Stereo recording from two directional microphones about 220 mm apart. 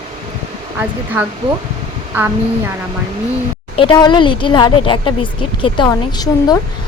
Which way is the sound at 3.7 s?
20° left (ahead or behind).